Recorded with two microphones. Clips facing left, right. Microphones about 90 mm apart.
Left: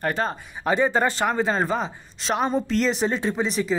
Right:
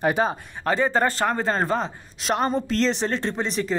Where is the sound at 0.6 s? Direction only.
5° left (ahead or behind).